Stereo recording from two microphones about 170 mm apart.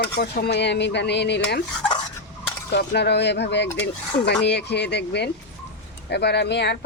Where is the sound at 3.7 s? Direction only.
90° left.